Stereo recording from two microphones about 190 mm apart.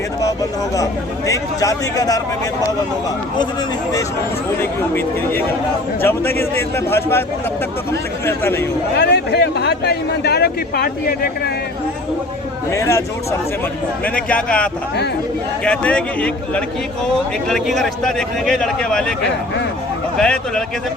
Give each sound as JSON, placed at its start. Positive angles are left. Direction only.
{"t": 1.3, "sound": "a man's voice", "side_deg": 20}
{"t": 4.6, "sound": "a man's voice", "side_deg": 10}
{"t": 9.0, "sound": "speech", "side_deg": 60}
{"t": 12.7, "sound": "a man's voice", "side_deg": 15}
{"t": 14.0, "sound": "a man's voice", "side_deg": 5}
{"t": 20.1, "sound": "a man's voice", "side_deg": 5}